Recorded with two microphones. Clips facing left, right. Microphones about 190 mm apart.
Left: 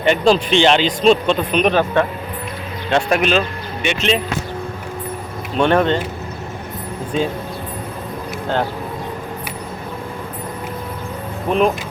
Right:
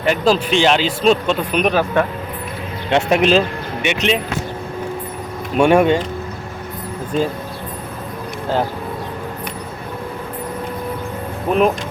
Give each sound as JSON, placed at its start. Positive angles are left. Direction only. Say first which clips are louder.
{"t": 0.0, "sound": "speech", "louder": "left 1 dB", "side_deg": -5}
{"t": 2.9, "sound": "speech", "louder": "right 2 dB", "side_deg": -25}
{"t": 3.8, "sound": "speech", "louder": "even", "side_deg": -15}
{"t": 5.5, "sound": "speech", "louder": "right 3 dB", "side_deg": -10}
{"t": 11.5, "sound": "speech", "louder": "right 1 dB", "side_deg": -5}